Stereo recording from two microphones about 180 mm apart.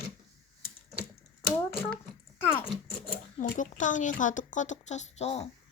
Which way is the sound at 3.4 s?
45° left (ahead or behind).